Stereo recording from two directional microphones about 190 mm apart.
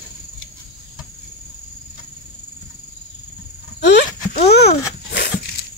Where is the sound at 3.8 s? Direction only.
60° left (ahead or behind).